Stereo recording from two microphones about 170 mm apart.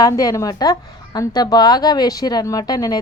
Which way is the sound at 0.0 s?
20° left (ahead or behind).